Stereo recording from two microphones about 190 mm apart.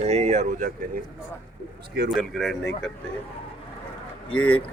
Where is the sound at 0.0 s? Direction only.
35° right (ahead or behind).